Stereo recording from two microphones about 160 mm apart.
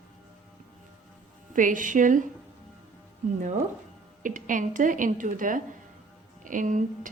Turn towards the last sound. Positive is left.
turn(degrees=-55)  # may be behind; listen again after turning